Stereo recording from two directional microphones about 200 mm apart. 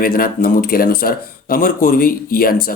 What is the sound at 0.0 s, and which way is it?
Speech, 45° left (ahead or behind).